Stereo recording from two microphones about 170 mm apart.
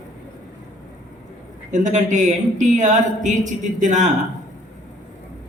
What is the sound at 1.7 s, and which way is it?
Speech, 45° right (ahead or behind).